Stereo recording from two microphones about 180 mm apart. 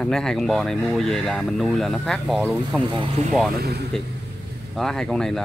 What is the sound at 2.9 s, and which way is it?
Speech, 30° right (ahead or behind).